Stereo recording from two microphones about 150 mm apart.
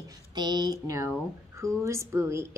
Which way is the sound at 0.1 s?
30° right (ahead or behind).